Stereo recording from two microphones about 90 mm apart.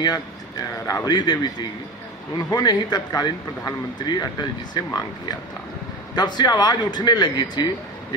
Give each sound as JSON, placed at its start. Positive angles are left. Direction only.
{"t": 0.0, "sound": "speech", "side_deg": 45}